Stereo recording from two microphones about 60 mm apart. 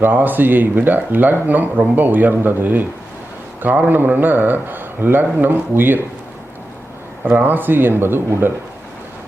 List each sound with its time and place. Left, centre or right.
0.0 s speech: right
7.3 s speech: right